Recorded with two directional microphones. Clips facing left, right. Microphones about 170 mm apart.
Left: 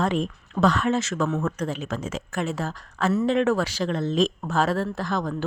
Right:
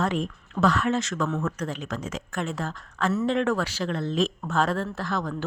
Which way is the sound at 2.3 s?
5° left (ahead or behind).